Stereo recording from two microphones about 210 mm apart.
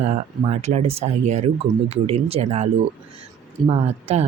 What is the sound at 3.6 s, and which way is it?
Speech, 30° right (ahead or behind).